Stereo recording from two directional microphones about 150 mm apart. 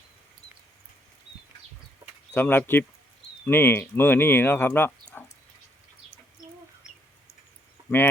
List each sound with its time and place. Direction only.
2.3 s speech: 10° left (ahead or behind)
5.1 s a sound: 5° left (ahead or behind)
7.9 s speech: 20° left (ahead or behind)